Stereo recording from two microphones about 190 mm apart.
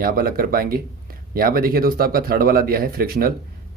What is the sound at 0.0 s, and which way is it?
Speech, 50° right (ahead or behind).